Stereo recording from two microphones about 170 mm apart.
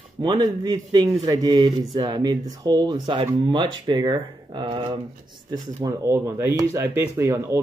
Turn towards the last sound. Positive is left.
turn(degrees=-15)  # may be behind; listen again after turning